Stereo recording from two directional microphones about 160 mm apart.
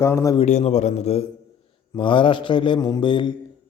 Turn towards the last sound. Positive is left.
turn(degrees=30)  # may be behind; listen again after turning